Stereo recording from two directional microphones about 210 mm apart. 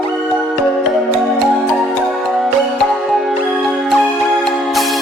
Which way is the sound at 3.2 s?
Centre (ahead or behind).